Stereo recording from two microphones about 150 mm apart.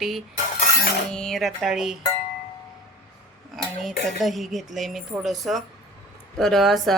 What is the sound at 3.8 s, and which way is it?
A woman's voice, centre (ahead or behind).